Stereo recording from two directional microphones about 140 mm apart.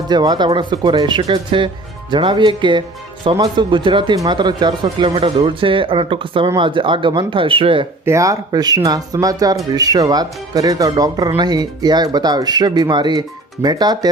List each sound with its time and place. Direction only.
0.1 s speech: 30° right (ahead or behind)
8.0 s speech: 20° right (ahead or behind)